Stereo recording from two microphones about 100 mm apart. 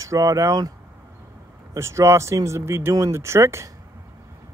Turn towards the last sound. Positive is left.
turn(degrees=-25)  # may be behind; listen again after turning